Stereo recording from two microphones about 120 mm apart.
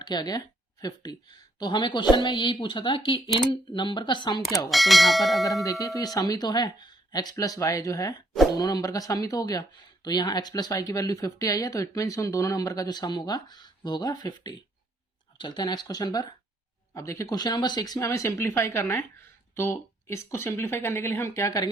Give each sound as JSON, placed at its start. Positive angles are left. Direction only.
{"t": 0.0, "sound": "speech", "side_deg": 35}
{"t": 4.7, "sound": "speech", "side_deg": 0}
{"t": 5.8, "sound": "speech", "side_deg": 30}